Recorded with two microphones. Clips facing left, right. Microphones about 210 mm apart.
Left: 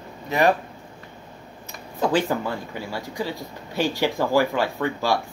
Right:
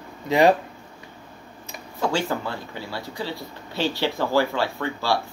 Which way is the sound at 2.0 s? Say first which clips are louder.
Left 3 dB; 15° left (ahead or behind).